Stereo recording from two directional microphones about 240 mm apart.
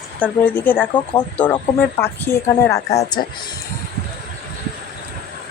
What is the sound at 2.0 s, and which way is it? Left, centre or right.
A woman's voice, centre.